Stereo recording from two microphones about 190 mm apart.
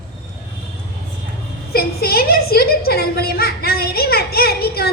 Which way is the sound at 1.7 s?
55° left (ahead or behind).